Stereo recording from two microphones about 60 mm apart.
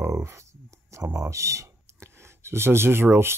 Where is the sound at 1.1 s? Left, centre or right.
Right.